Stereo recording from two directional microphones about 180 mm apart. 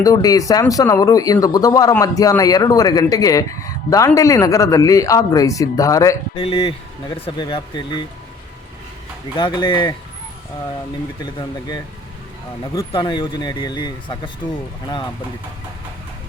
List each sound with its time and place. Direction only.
0.0 s speech: 20° left (ahead or behind)
6.3 s speech: 30° left (ahead or behind)
9.3 s speech: 25° left (ahead or behind)
11.2 s speech: 25° left (ahead or behind)
12.9 s speech: 25° left (ahead or behind)